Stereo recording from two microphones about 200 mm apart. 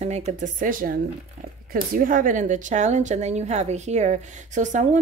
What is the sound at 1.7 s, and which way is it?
A woman's voice, 45° right (ahead or behind).